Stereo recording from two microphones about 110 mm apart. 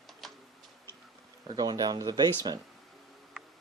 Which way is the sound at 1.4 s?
40° right (ahead or behind).